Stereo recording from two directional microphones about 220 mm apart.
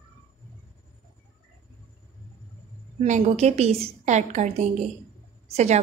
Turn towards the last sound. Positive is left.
turn(degrees=-30)  # may be behind; listen again after turning